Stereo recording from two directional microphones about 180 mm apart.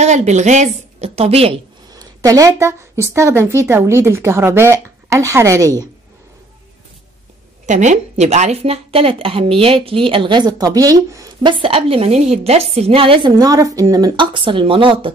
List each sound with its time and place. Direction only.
0.0 s a woman's voice: 40° right (ahead or behind)
1.9 s a woman's voice: 20° right (ahead or behind)
7.6 s speech: 40° right (ahead or behind)